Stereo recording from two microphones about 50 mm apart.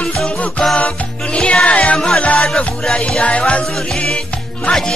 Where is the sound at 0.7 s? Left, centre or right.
Centre.